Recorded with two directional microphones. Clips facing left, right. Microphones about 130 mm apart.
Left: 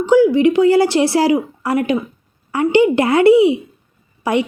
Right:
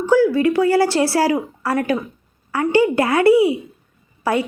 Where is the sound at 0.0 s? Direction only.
20° left (ahead or behind).